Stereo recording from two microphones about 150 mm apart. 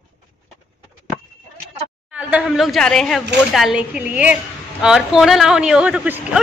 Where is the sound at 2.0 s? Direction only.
10° right (ahead or behind).